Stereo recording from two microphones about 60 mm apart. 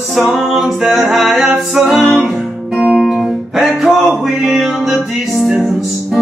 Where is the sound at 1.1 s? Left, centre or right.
Centre.